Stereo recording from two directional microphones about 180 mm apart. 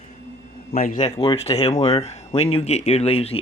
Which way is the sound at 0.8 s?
45° left (ahead or behind).